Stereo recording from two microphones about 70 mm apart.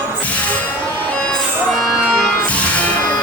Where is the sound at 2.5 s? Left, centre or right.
Centre.